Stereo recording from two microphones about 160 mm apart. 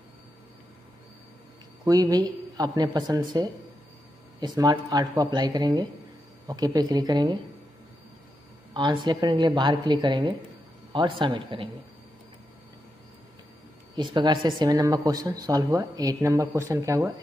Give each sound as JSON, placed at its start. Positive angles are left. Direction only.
{"t": 1.9, "sound": "speech", "side_deg": -25}
{"t": 8.7, "sound": "speech", "side_deg": -30}
{"t": 13.9, "sound": "speech", "side_deg": -25}